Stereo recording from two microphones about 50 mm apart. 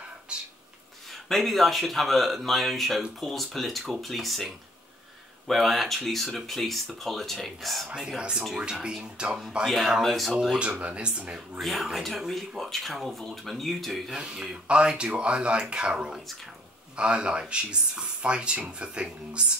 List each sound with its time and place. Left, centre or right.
0.3 s speech: centre
1.0 s speech: centre
5.5 s speech: centre
8.2 s speech: centre
10.0 s speech: centre
10.6 s speech: right
11.5 s speech: centre
14.1 s speech: centre